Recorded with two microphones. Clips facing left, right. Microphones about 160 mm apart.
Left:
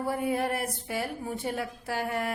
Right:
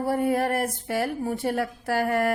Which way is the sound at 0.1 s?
45° right (ahead or behind).